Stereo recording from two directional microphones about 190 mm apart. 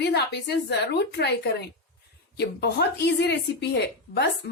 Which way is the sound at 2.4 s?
60° left (ahead or behind).